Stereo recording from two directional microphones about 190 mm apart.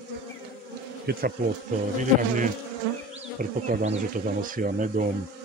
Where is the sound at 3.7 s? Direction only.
45° right (ahead or behind).